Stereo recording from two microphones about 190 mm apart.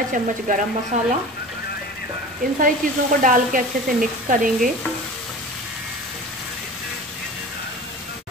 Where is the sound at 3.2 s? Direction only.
45° right (ahead or behind).